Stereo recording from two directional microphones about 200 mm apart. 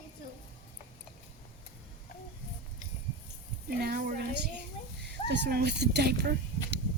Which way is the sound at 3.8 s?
50° right (ahead or behind).